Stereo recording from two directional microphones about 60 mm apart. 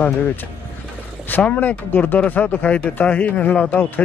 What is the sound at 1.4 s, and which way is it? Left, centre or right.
Speech, left.